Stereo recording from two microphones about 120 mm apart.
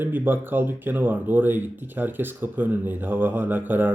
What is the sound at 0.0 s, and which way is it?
Speech, 15° right (ahead or behind).